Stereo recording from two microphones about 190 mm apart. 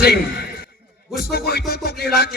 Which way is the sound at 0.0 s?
55° left (ahead or behind).